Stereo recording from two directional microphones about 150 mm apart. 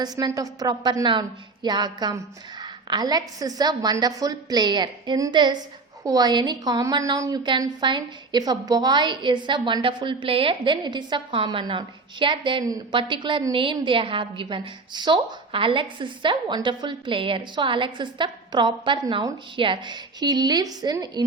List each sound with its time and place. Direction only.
0.0 s a woman's voice: 25° right (ahead or behind)